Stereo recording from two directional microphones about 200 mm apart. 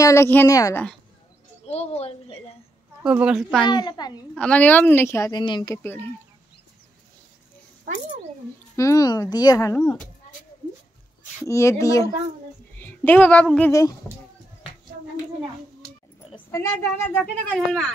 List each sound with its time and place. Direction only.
0.0 s speech: 15° left (ahead or behind)
1.7 s a woman's voice: 30° left (ahead or behind)
3.0 s a woman's voice: 5° right (ahead or behind)
3.6 s a child's voice: 20° left (ahead or behind)
4.4 s speech: 5° left (ahead or behind)
8.7 s speech: 15° left (ahead or behind)
11.4 s speech: 15° left (ahead or behind)
16.4 s speech: 10° left (ahead or behind)